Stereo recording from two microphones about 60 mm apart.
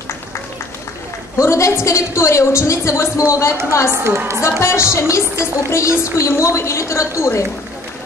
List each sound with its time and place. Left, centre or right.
1.4 s a woman's voice: left
3.9 s a woman's voice: right
4.4 s a woman's voice: left